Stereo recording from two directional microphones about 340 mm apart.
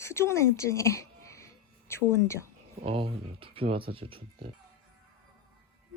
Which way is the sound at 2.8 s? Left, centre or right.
Centre.